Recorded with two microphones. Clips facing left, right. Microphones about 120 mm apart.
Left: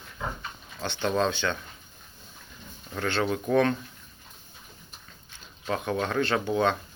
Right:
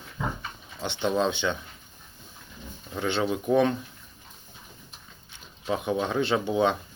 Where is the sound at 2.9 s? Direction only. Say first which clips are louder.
Right 1 dB; 5° right (ahead or behind).